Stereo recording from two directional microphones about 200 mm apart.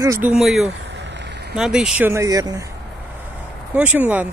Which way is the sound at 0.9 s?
60° right (ahead or behind).